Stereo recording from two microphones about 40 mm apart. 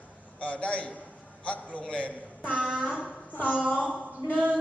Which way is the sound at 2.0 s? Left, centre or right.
Left.